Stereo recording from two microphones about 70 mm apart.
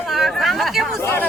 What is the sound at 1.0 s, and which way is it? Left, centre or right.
Chatter, left.